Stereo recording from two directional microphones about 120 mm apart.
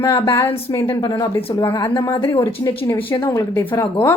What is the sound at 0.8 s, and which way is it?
Speech, 40° left (ahead or behind).